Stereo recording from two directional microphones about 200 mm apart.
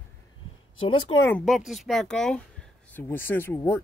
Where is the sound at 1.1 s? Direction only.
25° left (ahead or behind).